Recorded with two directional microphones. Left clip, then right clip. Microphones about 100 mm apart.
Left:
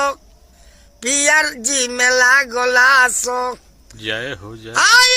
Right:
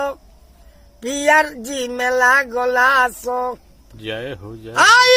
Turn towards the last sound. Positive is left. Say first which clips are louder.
# right 1 dB
turn(degrees=-35)  # may be behind; listen again after turning